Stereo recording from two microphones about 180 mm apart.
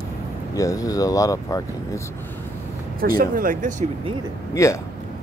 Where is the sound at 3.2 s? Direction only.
50° right (ahead or behind).